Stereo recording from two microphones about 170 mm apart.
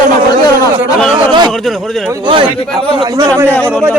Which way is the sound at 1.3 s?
25° right (ahead or behind).